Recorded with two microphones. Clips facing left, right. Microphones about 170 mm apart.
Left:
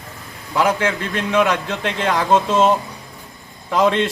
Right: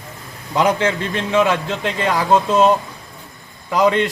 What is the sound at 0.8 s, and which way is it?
A man's voice, 15° right (ahead or behind).